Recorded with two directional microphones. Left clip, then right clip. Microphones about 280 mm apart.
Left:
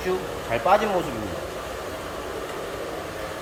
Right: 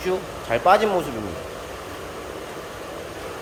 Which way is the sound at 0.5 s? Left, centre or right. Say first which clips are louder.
Right 3 dB; centre.